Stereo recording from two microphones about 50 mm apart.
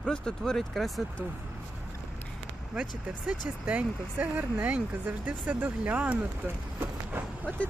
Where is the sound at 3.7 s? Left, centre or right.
Right.